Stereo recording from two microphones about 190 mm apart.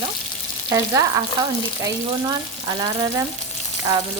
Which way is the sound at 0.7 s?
20° right (ahead or behind).